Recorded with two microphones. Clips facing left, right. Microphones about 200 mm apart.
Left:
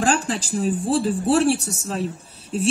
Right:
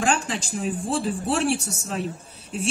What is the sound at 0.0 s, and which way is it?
A woman's voice, 35° left (ahead or behind).